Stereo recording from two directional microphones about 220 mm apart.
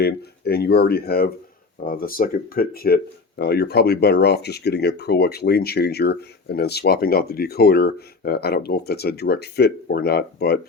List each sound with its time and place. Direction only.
0.0 s speech: 45° left (ahead or behind)